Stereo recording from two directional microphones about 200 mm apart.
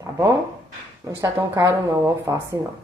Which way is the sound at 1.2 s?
15° right (ahead or behind).